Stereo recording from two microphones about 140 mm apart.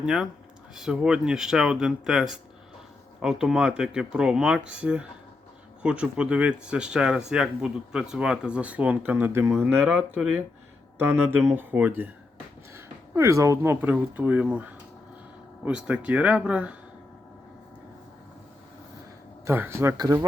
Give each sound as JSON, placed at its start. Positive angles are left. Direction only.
{"t": 0.0, "sound": "speech", "side_deg": -5}
{"t": 19.5, "sound": "speech", "side_deg": -15}